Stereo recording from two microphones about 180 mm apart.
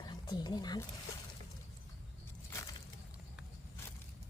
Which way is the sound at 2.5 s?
15° left (ahead or behind).